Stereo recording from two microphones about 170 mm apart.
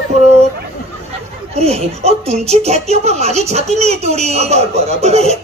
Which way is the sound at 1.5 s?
40° right (ahead or behind).